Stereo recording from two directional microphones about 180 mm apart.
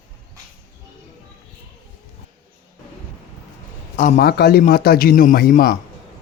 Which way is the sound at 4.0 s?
50° left (ahead or behind).